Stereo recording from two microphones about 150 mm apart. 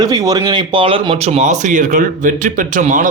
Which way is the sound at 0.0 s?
25° right (ahead or behind).